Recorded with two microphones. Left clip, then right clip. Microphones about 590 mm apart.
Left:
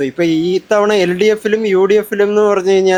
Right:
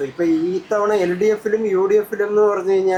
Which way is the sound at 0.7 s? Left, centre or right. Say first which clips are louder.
Left 5 dB; left.